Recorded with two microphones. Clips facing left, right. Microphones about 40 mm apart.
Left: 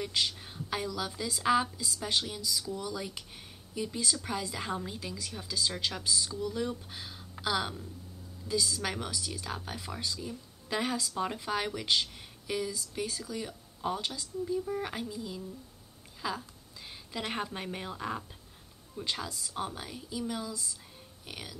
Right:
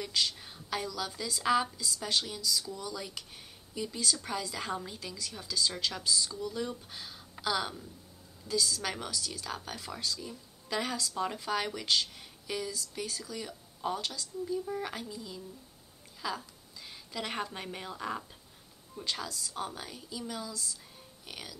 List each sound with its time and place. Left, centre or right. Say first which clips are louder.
0.0 s a woman's voice: left 1 dB; centre
3.7 s a woman's voice: even; centre
6.3 s a woman's voice: left 2 dB; centre
16.2 s a sound: left 1 dB; centre
17.3 s a woman's voice: left 2 dB; centre
19.2 s a woman's voice: left 1 dB; left